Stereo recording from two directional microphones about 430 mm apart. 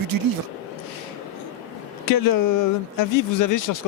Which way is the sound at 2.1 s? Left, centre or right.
Left.